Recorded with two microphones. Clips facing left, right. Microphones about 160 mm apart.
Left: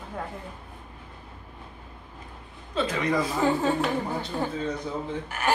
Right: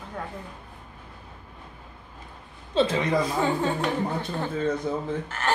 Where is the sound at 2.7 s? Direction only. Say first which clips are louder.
Right 5 dB; 30° right (ahead or behind).